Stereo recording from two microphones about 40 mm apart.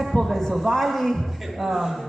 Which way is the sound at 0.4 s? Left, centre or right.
Centre.